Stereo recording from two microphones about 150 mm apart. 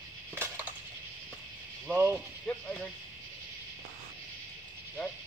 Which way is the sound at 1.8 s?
10° right (ahead or behind).